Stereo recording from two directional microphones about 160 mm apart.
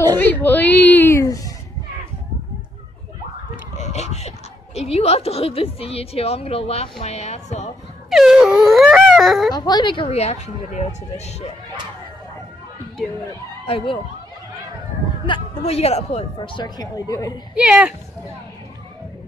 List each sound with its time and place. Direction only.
0.2 s speech: 10° left (ahead or behind)
3.7 s a sound: 45° left (ahead or behind)
4.7 s a woman's voice: 40° left (ahead or behind)
8.1 s wail: 5° right (ahead or behind)
9.5 s a woman's voice: 25° left (ahead or behind); by 11.3 s 45° left (ahead or behind)
13.7 s a woman's voice: 35° left (ahead or behind)
15.2 s a woman's voice: 35° left (ahead or behind)
16.3 s a woman's voice: 30° left (ahead or behind)
17.6 s speech: 5° right (ahead or behind)